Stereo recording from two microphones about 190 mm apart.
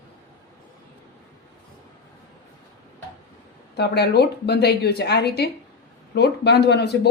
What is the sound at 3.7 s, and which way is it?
Speech, 60° left (ahead or behind).